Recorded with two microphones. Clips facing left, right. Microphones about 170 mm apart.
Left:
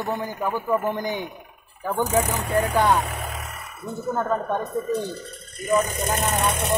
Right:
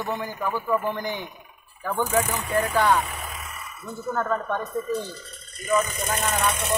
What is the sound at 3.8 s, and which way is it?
Speech, 20° left (ahead or behind).